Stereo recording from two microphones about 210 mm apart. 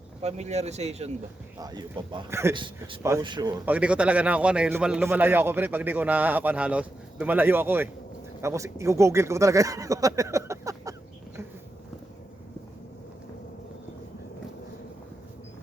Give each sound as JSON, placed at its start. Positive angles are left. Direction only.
{"t": 0.2, "sound": "speech", "side_deg": -30}
{"t": 1.6, "sound": "a man's voice", "side_deg": -20}
{"t": 3.7, "sound": "a man's voice", "side_deg": -5}